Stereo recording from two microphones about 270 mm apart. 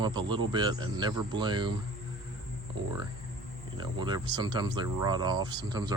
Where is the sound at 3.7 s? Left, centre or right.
Centre.